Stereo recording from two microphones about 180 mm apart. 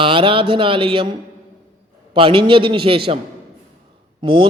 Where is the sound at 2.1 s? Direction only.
30° right (ahead or behind).